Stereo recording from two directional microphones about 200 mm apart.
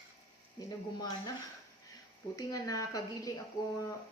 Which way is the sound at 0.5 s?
20° left (ahead or behind).